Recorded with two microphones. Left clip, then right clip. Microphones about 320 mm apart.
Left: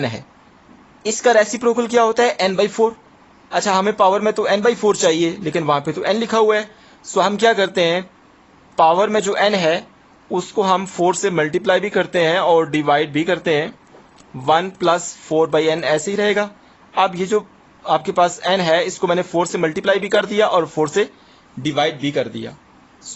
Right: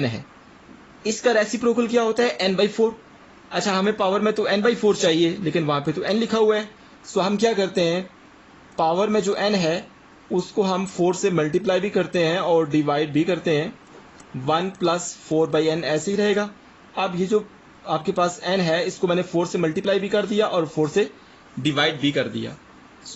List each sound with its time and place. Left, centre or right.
1.0 s a man's voice: left